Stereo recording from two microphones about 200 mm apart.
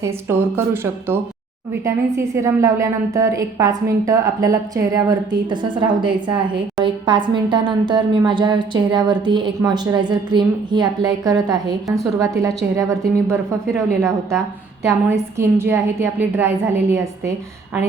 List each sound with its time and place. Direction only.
0.0 s a woman's voice: 10° right (ahead or behind)
15.1 s a woman's voice: 15° right (ahead or behind)